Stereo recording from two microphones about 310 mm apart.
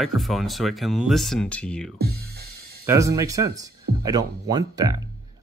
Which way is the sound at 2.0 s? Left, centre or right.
Right.